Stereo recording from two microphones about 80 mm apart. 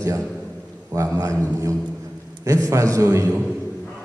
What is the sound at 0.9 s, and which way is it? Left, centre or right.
A man's voice, right.